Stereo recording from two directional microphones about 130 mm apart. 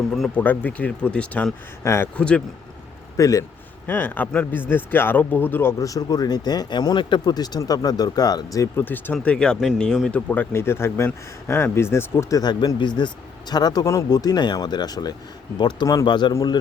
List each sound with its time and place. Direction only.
0.1 s speech: 10° left (ahead or behind)
3.2 s speech: 25° left (ahead or behind)
3.8 s speech: 15° left (ahead or behind)
12.4 s speech: 35° left (ahead or behind)